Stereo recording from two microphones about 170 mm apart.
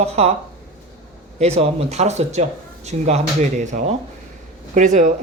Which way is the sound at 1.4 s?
40° right (ahead or behind).